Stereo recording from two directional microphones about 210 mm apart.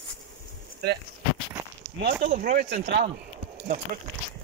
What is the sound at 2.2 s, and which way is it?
Speech, 35° right (ahead or behind).